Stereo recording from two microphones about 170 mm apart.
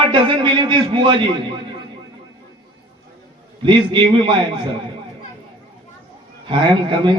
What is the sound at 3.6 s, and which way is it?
Speech, 30° right (ahead or behind).